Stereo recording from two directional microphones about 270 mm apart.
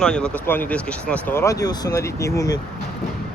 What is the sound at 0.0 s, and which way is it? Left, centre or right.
Speech, centre.